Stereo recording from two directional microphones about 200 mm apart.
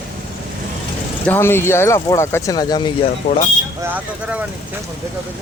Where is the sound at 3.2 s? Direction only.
30° left (ahead or behind).